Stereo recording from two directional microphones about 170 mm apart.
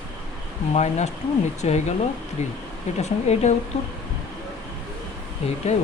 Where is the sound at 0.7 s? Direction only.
40° left (ahead or behind).